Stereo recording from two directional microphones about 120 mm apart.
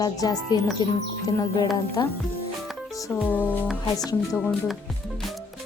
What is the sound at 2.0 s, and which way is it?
Speech, 35° left (ahead or behind).